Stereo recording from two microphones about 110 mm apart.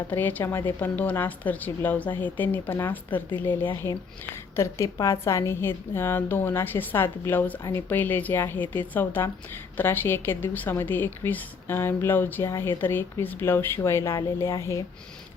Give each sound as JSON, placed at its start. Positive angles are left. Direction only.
{"t": 0.1, "sound": "a woman's voice", "side_deg": 15}